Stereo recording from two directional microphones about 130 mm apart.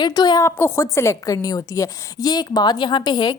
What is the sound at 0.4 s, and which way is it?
A woman's voice, 20° left (ahead or behind).